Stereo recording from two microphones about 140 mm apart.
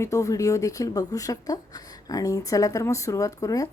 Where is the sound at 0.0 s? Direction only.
20° left (ahead or behind).